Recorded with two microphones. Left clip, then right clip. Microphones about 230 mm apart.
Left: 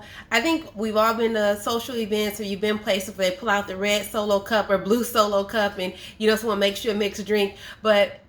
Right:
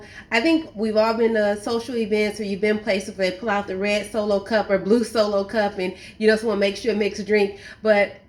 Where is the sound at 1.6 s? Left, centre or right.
Left.